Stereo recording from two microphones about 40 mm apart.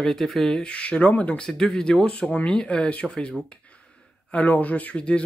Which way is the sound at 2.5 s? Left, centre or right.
Left.